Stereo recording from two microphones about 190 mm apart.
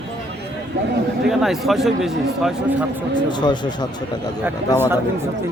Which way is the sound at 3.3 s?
25° left (ahead or behind).